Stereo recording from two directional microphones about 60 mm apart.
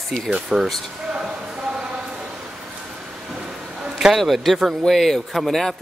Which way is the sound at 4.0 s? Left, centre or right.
Centre.